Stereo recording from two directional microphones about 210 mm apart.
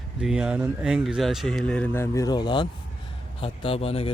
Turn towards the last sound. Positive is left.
turn(degrees=30)  # may be behind; listen again after turning